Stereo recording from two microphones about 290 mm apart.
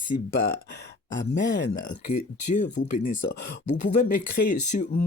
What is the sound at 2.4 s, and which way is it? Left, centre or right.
Speech, left.